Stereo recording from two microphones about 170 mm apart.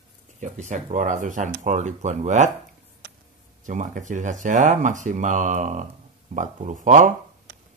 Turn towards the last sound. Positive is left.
turn(degrees=-50)  # may be behind; listen again after turning